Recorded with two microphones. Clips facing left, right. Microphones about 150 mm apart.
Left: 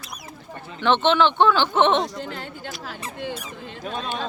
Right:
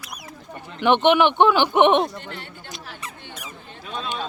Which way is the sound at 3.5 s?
90° left.